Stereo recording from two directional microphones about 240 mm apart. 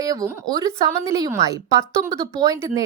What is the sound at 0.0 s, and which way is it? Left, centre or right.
A woman's voice, centre.